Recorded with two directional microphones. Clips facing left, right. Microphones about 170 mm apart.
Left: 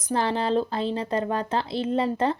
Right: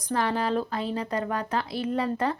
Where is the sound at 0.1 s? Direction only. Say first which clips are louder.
Left 2 dB; 25° left (ahead or behind).